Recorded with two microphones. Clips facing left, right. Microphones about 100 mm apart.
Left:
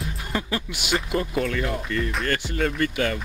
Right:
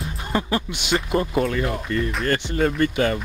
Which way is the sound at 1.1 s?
25° right (ahead or behind).